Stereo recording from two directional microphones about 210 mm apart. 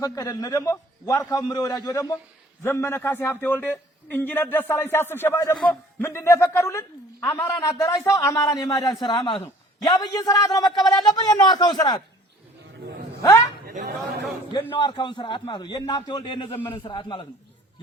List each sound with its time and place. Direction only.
0.0 s a man's voice: 15° left (ahead or behind)
13.7 s speech: 45° right (ahead or behind)
14.7 s a man's voice: 20° left (ahead or behind)